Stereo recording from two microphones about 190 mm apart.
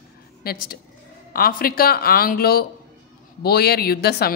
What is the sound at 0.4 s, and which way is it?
A woman's voice, 50° left (ahead or behind).